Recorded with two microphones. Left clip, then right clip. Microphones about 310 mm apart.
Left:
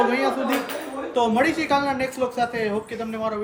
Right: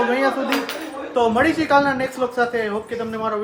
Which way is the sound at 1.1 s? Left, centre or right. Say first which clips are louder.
Right 3 dB; centre.